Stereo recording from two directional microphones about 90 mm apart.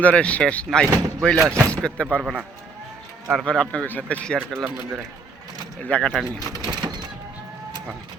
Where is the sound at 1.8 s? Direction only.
10° left (ahead or behind).